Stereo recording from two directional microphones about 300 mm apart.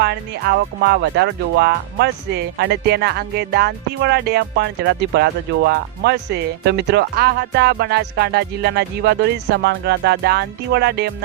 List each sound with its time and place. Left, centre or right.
0.0 s speech: right